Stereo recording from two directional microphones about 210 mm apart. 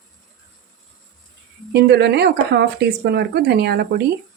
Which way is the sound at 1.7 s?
55° right (ahead or behind).